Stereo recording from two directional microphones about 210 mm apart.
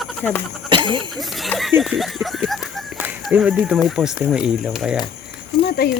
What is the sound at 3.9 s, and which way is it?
Speech, 5° right (ahead or behind).